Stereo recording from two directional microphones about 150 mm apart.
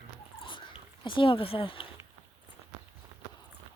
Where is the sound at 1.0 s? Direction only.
35° left (ahead or behind).